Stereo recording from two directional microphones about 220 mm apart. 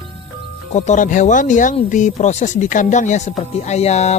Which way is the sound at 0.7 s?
35° left (ahead or behind).